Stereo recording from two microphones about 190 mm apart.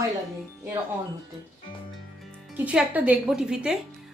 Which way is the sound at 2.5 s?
5° right (ahead or behind).